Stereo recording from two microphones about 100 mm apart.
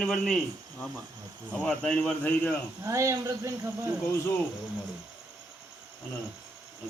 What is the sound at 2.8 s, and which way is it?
Speech, 30° right (ahead or behind).